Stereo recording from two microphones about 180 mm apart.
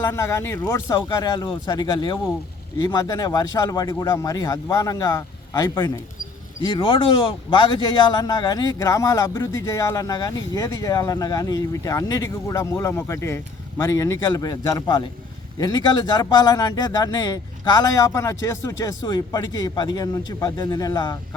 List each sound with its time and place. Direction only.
0.1 s speech: 15° left (ahead or behind)